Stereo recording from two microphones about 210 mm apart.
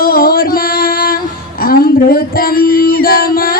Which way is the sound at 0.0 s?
45° left (ahead or behind).